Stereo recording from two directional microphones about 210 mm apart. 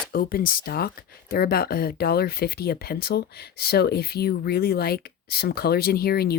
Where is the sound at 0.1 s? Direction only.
45° left (ahead or behind).